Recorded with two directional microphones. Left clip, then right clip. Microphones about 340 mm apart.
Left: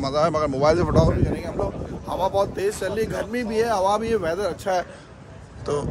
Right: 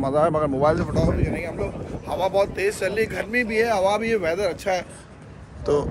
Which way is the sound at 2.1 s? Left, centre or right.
Centre.